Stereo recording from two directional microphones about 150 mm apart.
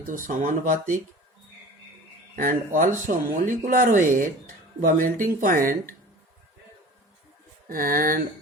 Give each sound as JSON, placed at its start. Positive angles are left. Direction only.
{"t": 0.1, "sound": "speech", "side_deg": -60}
{"t": 2.3, "sound": "speech", "side_deg": -65}
{"t": 7.7, "sound": "speech", "side_deg": -70}